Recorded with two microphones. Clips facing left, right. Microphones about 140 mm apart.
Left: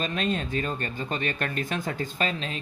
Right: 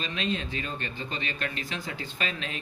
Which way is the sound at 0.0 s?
45° left (ahead or behind).